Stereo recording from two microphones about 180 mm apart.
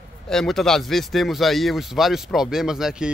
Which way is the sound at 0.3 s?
Centre (ahead or behind).